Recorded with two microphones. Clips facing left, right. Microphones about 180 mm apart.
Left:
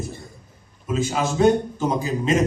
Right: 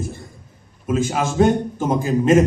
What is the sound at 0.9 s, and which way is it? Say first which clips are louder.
A man's voice: right 3 dB; 50° right (ahead or behind).